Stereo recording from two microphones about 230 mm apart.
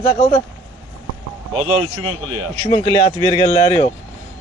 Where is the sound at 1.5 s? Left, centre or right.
Right.